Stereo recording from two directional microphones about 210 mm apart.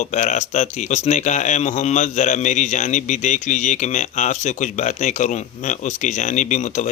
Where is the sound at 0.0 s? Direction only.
35° left (ahead or behind).